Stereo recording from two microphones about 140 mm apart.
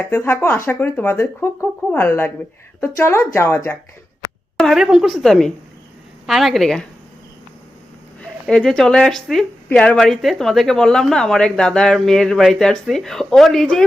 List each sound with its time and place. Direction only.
0.1 s speech: 20° left (ahead or behind)
4.5 s speech: centre (ahead or behind)
8.2 s speech: 5° left (ahead or behind)